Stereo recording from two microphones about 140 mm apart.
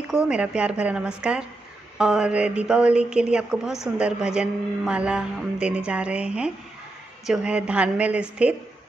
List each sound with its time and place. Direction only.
0.1 s speech: 5° right (ahead or behind)